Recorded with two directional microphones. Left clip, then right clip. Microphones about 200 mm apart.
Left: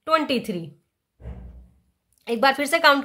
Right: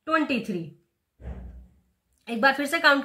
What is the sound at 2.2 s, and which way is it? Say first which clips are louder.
Speech: left 2 dB; 45° left (ahead or behind).